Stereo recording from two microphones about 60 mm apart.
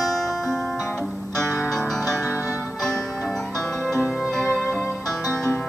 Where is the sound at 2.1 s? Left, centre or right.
Right.